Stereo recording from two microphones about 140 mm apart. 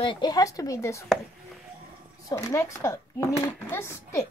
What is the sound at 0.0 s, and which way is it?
Speech, 35° left (ahead or behind).